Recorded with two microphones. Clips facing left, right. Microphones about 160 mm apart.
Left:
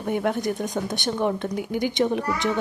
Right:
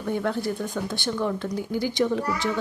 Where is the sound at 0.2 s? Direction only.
20° left (ahead or behind).